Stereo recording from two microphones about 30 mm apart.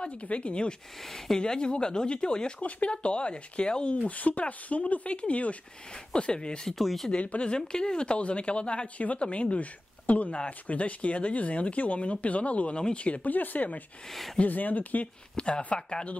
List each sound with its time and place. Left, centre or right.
0.0 s a woman's voice: left
1.0 s speech: centre
1.4 s a woman's voice: left
4.1 s speech: left
5.1 s speech: left
6.1 s a woman's voice: left
6.7 s speech: centre
7.1 s a woman's voice: left
8.9 s speech: left
13.2 s speech: left
15.3 s a woman's voice: left